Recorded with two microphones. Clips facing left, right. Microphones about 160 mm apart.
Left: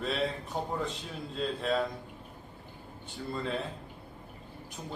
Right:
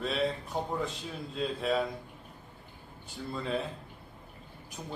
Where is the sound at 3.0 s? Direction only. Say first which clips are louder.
Left 1 dB; centre (ahead or behind).